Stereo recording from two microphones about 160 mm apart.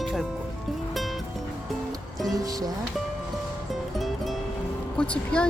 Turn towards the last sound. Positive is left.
turn(degrees=5)  # may be behind; listen again after turning